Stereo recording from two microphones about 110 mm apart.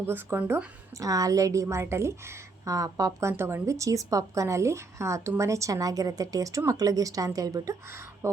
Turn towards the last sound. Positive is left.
turn(degrees=-30)  # may be behind; listen again after turning